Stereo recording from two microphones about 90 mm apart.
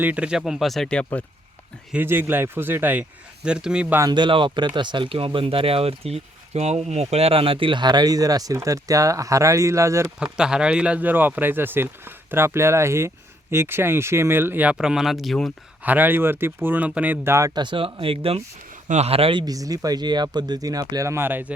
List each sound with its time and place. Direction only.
0.0 s speech: 15° right (ahead or behind); by 1.2 s 10° left (ahead or behind)
2.0 s speech: 20° right (ahead or behind)
4.1 s speech: 65° right (ahead or behind); by 6.2 s 90° right
7.3 s speech: 90° right; by 10.1 s 35° right (ahead or behind)
10.3 s speech: 10° right (ahead or behind)
14.8 s speech: 5° right (ahead or behind)
15.8 s speech: 20° right (ahead or behind)
17.5 s speech: 60° right (ahead or behind)
18.0 s speech: 90° right
19.1 s speech: 75° right (ahead or behind)
19.5 s speech: 40° right (ahead or behind); by 21.5 s 25° right (ahead or behind)